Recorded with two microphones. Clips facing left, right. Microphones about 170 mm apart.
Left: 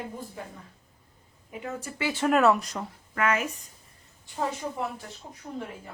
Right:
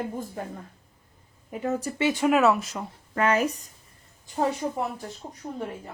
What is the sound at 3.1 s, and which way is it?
A woman's voice, 35° right (ahead or behind).